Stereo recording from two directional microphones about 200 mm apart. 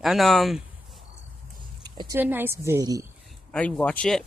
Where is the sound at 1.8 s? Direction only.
20° right (ahead or behind).